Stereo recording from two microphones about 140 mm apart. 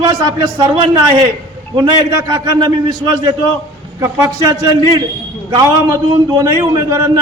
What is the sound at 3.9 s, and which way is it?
A man's voice, 25° right (ahead or behind).